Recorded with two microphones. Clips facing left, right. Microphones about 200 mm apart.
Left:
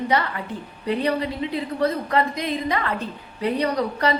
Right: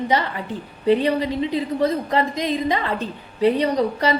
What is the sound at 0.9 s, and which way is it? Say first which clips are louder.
A woman's voice: right 5 dB; 20° right (ahead or behind).